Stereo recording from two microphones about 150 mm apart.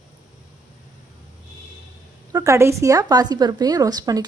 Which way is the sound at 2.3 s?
20° right (ahead or behind).